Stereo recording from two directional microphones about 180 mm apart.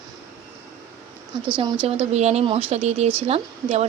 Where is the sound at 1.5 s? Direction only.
25° right (ahead or behind).